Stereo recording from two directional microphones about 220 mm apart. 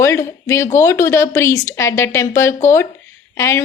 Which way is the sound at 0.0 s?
10° left (ahead or behind).